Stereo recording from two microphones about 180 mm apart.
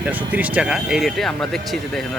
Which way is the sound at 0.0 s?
10° right (ahead or behind).